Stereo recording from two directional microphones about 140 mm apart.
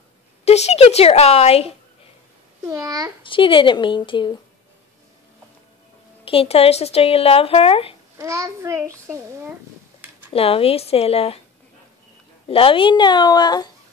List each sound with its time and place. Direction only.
0.5 s speech: 50° left (ahead or behind)
2.6 s a child's voice: 20° right (ahead or behind)
3.3 s speech: 35° left (ahead or behind)
6.2 s speech: 45° left (ahead or behind)
8.2 s a child's voice: 20° right (ahead or behind)
10.3 s speech: 45° left (ahead or behind)
12.4 s speech: 40° left (ahead or behind)